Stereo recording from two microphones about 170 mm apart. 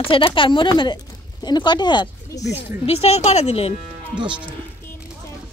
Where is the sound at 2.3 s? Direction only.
90° left.